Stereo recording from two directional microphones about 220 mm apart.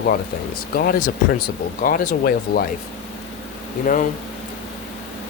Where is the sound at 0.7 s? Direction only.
40° left (ahead or behind).